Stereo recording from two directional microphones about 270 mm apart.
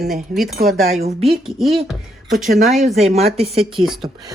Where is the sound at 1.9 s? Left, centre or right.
Centre.